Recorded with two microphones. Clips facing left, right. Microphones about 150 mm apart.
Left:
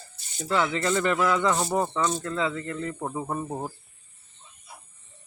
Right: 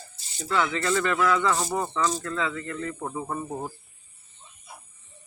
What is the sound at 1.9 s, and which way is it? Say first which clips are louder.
Speech: even; 25° left (ahead or behind).